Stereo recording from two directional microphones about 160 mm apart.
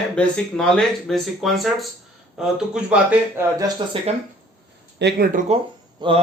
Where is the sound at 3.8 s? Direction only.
30° right (ahead or behind).